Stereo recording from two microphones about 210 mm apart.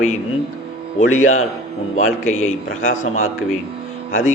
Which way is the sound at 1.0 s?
80° left.